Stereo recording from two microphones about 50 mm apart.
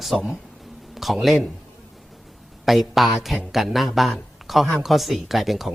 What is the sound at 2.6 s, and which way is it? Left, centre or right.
Speech, centre.